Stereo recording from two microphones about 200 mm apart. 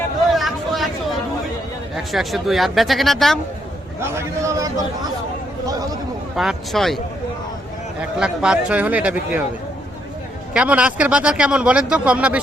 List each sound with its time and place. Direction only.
0.3 s a sound: centre (ahead or behind)
2.0 s a man's voice: centre (ahead or behind)
4.0 s speech: 15° right (ahead or behind)
6.3 s a man's voice: centre (ahead or behind)
8.2 s speech: 5° right (ahead or behind)
10.5 s a man's voice: 5° right (ahead or behind)